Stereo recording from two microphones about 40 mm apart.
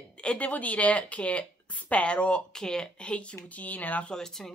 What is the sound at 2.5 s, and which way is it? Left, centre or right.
Speech, centre.